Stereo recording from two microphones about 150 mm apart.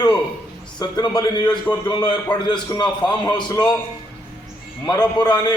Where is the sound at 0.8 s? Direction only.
25° left (ahead or behind).